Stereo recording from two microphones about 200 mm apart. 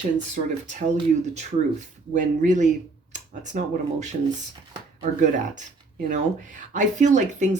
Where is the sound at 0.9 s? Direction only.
35° right (ahead or behind).